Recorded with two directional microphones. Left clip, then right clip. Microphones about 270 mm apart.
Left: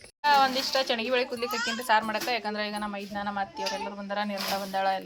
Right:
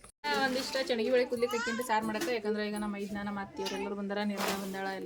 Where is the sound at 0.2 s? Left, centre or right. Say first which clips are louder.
Left 9 dB; centre.